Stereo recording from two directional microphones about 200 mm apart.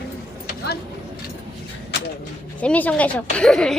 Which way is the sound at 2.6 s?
5° left (ahead or behind).